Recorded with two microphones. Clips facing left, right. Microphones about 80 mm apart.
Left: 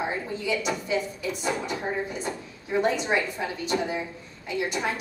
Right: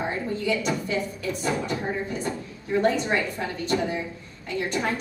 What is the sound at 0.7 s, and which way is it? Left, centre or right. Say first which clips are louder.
A woman's voice: right 1 dB; centre.